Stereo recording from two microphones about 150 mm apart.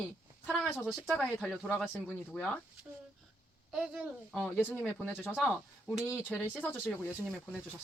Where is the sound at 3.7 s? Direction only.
Centre (ahead or behind).